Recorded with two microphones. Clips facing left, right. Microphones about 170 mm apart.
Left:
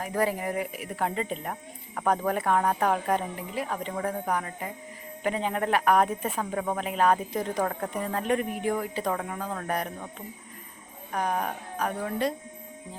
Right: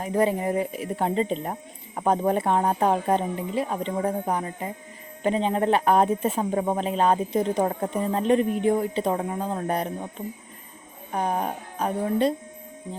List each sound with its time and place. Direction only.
0.0 s speech: 25° right (ahead or behind)